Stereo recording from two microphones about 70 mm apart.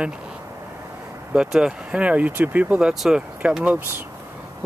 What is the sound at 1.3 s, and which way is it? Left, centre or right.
Speech, centre.